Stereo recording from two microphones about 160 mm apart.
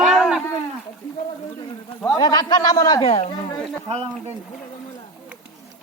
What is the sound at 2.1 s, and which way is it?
A man's voice, 25° left (ahead or behind).